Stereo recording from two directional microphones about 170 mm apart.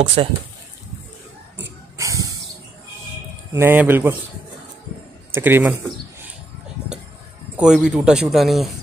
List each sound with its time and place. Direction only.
0.0 s speech: 30° right (ahead or behind)
2.0 s a sound: 20° right (ahead or behind)
3.5 s speech: 15° right (ahead or behind)
5.3 s speech: 10° right (ahead or behind)
7.5 s a man's voice: 5° right (ahead or behind)